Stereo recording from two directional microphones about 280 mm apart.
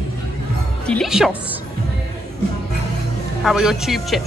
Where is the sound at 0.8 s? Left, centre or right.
Centre.